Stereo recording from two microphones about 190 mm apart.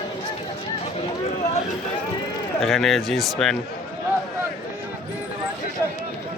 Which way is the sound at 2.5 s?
Centre (ahead or behind).